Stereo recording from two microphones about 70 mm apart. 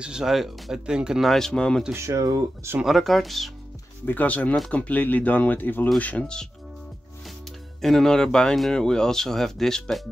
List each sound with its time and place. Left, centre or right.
0.0 s speech: centre
1.2 s speech: centre
2.0 s speech: right
2.8 s speech: centre
4.0 s speech: left
7.8 s speech: centre